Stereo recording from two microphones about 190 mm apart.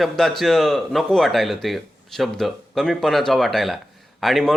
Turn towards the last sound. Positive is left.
turn(degrees=0)  # may be behind; listen again after turning